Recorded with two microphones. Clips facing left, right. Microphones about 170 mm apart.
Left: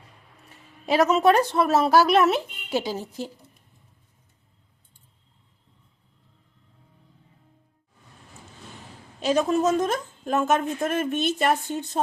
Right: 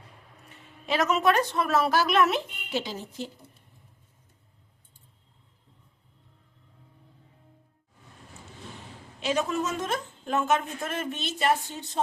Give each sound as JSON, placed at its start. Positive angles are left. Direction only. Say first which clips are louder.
{"t": 0.9, "sound": "speech", "louder": "left 5 dB", "side_deg": 35}
{"t": 9.2, "sound": "speech", "louder": "left 6 dB", "side_deg": 40}